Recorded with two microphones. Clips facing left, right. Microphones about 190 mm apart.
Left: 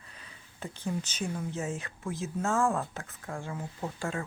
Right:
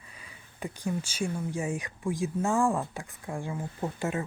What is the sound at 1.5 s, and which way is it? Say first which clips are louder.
Speech: right 3 dB; 15° right (ahead or behind).